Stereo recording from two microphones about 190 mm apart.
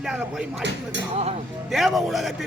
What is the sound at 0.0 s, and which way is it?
Speech, 5° right (ahead or behind).